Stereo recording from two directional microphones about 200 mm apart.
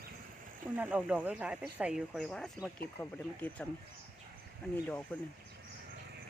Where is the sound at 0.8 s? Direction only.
5° right (ahead or behind).